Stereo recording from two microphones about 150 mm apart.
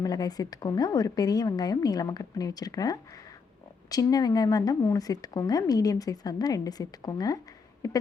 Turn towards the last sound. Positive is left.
turn(degrees=25)  # may be behind; listen again after turning